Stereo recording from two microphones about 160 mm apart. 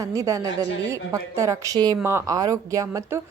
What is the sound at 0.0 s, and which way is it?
A woman's voice, 20° right (ahead or behind).